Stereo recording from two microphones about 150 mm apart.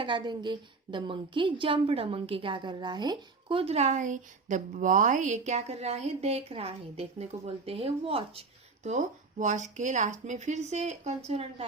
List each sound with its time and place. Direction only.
0.0 s a woman's voice: 30° right (ahead or behind)